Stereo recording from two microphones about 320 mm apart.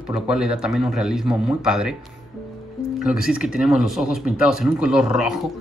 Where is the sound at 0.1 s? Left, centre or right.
Centre.